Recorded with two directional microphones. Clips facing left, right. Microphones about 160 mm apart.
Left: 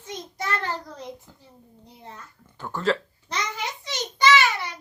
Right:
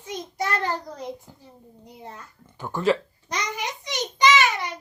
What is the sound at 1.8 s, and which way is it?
Babbling, 15° right (ahead or behind).